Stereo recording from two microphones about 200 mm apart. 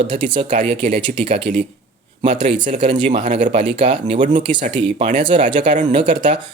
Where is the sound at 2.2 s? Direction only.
25° right (ahead or behind).